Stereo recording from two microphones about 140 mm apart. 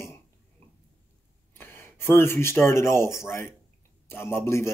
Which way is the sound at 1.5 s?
15° left (ahead or behind).